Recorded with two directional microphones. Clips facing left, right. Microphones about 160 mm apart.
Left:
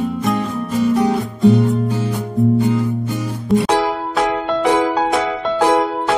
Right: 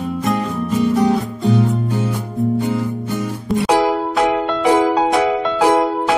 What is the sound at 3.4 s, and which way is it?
Music, centre (ahead or behind).